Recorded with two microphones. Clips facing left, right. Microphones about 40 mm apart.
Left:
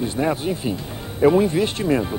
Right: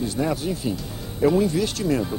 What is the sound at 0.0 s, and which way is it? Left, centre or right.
Speech, left.